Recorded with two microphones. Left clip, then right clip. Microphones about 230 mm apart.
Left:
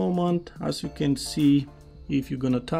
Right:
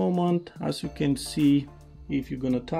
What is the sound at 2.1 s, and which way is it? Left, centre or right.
Speech, centre.